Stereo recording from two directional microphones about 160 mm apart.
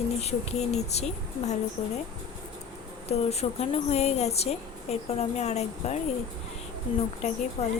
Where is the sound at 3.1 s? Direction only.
40° left (ahead or behind).